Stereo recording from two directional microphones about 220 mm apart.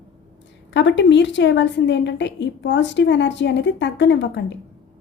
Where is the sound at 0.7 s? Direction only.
55° left (ahead or behind).